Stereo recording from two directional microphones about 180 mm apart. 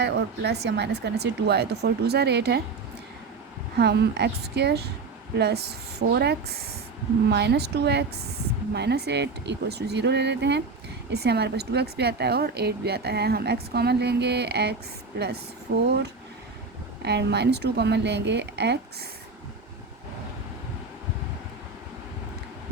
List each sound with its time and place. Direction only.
0.0 s a woman's voice: 65° right (ahead or behind)
3.8 s a woman's voice: 65° right (ahead or behind)
17.0 s speech: 70° right (ahead or behind)